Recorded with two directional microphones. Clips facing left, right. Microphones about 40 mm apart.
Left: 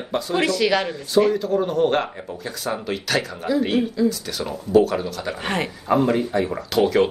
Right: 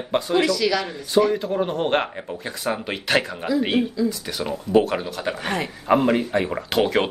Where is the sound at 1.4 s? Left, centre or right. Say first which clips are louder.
Left 3 dB; right.